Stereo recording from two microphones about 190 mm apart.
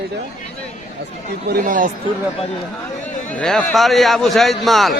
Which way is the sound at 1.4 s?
45° right (ahead or behind).